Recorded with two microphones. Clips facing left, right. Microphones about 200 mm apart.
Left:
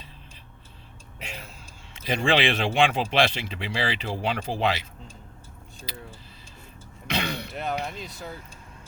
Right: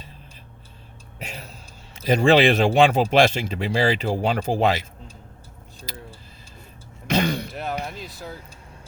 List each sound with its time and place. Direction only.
1.2 s a sound: 40° right (ahead or behind)
2.0 s a man's voice: 40° right (ahead or behind)
5.9 s vehicle: 45° right (ahead or behind)
7.1 s throat clearing: 45° right (ahead or behind)
7.5 s speech: centre (ahead or behind)